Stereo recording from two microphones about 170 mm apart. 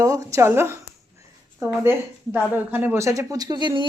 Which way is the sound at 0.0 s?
20° right (ahead or behind).